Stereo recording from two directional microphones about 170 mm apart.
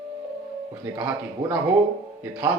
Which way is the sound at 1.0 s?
10° right (ahead or behind).